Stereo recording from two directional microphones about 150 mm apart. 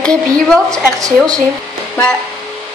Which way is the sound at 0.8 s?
20° right (ahead or behind).